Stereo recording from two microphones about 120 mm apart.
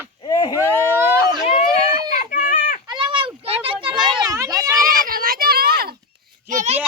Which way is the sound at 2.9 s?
45° right (ahead or behind).